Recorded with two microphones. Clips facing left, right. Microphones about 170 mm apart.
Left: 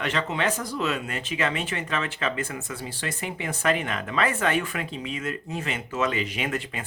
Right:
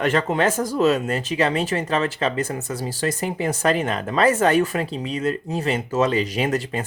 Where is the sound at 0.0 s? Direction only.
45° right (ahead or behind).